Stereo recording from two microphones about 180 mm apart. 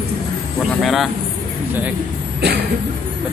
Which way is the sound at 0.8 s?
Centre (ahead or behind).